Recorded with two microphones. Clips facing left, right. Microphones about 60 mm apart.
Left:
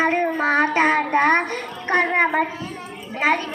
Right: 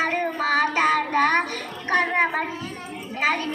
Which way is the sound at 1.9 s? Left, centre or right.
Left.